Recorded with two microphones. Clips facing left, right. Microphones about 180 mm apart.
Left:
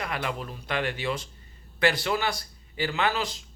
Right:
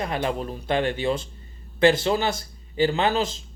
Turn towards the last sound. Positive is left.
turn(degrees=-25)  # may be behind; listen again after turning